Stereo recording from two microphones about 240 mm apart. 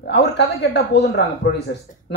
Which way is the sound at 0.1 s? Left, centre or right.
Left.